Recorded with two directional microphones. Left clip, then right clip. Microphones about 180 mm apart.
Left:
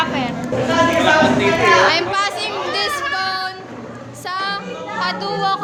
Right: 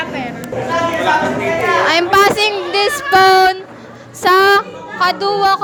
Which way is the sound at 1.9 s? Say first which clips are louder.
Right 7 dB; 45° right (ahead or behind).